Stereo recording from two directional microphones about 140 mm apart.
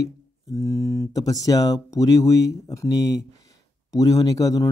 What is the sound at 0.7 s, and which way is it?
Speech, 20° left (ahead or behind).